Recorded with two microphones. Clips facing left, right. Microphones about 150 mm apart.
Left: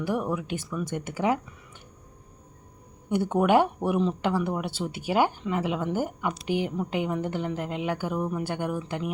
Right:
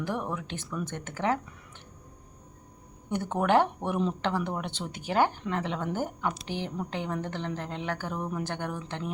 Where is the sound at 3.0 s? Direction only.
10° left (ahead or behind).